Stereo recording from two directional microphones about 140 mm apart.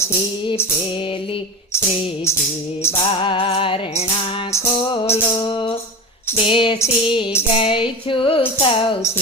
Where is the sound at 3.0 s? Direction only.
40° left (ahead or behind).